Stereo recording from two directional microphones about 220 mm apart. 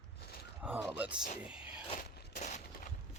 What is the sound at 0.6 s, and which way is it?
Speech, 5° right (ahead or behind).